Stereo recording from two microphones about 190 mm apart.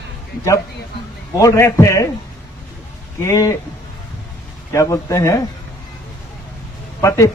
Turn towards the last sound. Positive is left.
turn(degrees=15)  # may be behind; listen again after turning